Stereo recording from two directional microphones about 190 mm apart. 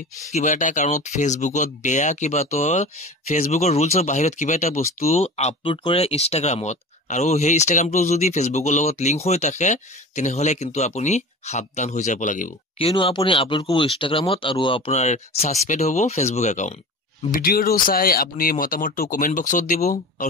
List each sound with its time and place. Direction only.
0.3 s speech: 40° left (ahead or behind)
12.7 s speech: 25° left (ahead or behind)
17.3 s speech: 50° left (ahead or behind)